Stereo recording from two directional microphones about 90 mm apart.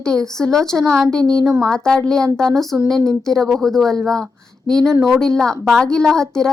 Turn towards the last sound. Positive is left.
turn(degrees=5)  # may be behind; listen again after turning